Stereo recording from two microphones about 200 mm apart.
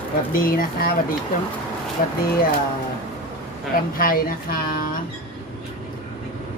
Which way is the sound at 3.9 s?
45° left (ahead or behind).